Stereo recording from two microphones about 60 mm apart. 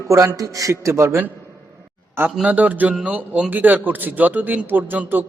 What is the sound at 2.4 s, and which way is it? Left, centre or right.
A man's voice, right.